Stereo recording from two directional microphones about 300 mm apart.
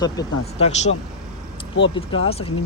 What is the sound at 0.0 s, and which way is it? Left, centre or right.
Speech, centre.